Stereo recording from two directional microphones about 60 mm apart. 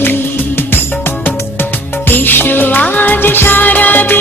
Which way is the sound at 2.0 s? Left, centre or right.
Left.